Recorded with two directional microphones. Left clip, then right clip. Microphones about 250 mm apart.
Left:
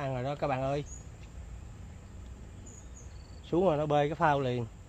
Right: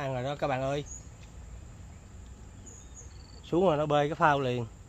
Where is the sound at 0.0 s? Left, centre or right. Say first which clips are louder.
Right 1 dB; right.